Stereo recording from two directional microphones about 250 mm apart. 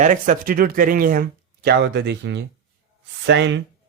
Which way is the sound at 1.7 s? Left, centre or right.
Right.